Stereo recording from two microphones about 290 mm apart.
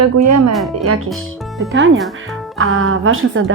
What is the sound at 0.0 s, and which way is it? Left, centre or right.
Speech, right.